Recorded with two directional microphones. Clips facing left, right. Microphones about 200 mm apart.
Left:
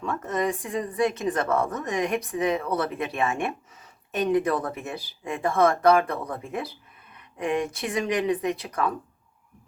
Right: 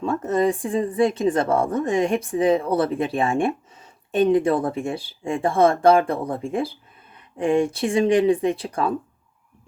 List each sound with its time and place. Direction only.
0.0 s speech: 30° right (ahead or behind)